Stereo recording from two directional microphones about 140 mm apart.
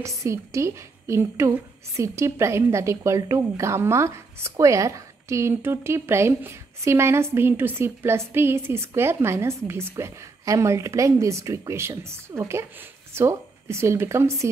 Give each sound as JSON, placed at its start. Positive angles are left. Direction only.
{"t": 0.0, "sound": "a woman's voice", "side_deg": -20}